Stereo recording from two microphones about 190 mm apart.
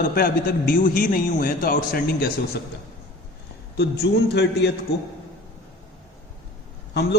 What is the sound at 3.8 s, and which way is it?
Speech, 60° left (ahead or behind).